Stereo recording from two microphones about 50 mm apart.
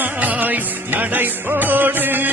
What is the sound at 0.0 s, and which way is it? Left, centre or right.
Music, right.